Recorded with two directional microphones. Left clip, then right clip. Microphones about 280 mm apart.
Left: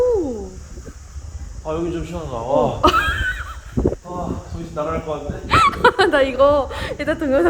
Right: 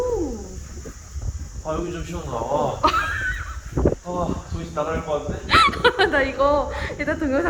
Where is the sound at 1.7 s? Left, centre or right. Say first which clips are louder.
Left 2 dB; left.